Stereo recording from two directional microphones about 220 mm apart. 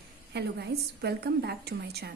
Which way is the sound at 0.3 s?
50° right (ahead or behind).